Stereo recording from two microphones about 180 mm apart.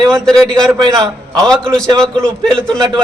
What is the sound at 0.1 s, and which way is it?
Speech, 5° left (ahead or behind).